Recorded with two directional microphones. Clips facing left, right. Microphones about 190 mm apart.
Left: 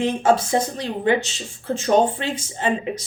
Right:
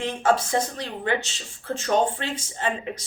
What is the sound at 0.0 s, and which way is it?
Speech, 15° left (ahead or behind).